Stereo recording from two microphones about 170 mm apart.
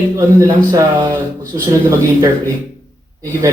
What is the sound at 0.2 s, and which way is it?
A man's voice, 20° right (ahead or behind).